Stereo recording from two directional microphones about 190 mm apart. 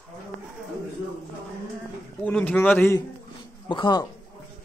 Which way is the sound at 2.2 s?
5° left (ahead or behind).